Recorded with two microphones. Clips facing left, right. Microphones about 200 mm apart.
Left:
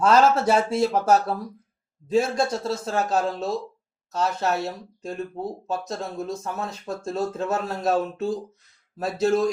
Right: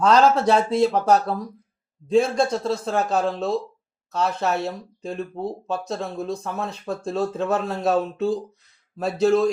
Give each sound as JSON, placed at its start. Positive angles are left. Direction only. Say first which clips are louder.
{"t": 0.0, "sound": "speech", "louder": "right 1 dB", "side_deg": 5}